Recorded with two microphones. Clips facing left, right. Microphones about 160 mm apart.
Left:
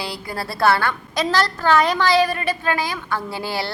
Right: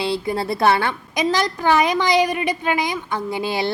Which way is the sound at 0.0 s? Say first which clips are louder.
Right 7 dB; 25° right (ahead or behind).